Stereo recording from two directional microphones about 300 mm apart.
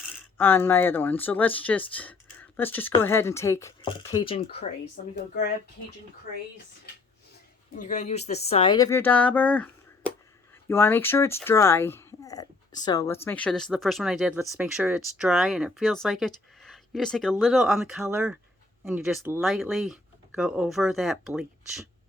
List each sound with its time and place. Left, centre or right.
0.3 s speech: centre; by 5.1 s left
7.8 s speech: left; by 21.8 s centre